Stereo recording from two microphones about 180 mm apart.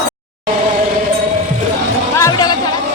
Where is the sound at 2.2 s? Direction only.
20° left (ahead or behind).